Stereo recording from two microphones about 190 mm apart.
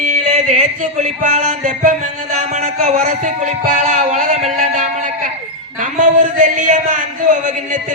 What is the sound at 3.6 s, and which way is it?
Music, 40° right (ahead or behind).